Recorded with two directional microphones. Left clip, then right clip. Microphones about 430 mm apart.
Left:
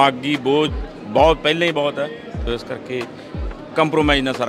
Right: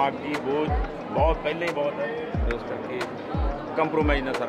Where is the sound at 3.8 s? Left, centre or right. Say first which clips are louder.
Left 8 dB; left.